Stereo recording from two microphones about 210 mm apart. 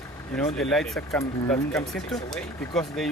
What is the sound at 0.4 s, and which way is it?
Speech, centre (ahead or behind).